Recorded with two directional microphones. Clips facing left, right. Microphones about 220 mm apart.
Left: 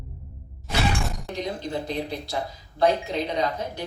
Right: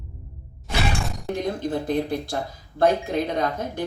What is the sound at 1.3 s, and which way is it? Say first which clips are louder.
A man's voice: right 5 dB; 50° right (ahead or behind).